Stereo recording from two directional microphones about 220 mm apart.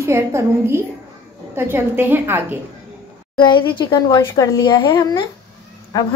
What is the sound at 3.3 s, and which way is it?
A child's voice, 20° left (ahead or behind).